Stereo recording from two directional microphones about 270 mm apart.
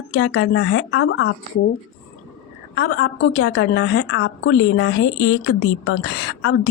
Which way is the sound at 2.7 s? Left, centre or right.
Left.